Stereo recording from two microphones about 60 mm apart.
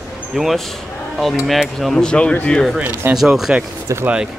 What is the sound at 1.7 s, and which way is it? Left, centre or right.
Speech, centre.